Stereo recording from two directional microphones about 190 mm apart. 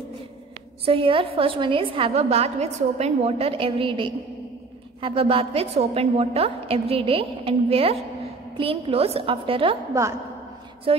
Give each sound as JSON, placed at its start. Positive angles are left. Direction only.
{"t": 0.8, "sound": "a woman's voice", "side_deg": -30}
{"t": 10.9, "sound": "a woman's voice", "side_deg": -30}